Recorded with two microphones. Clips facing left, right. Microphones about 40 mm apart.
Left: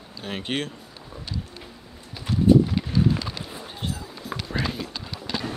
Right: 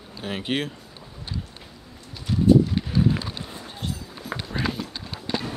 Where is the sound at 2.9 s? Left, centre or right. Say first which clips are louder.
Even; right.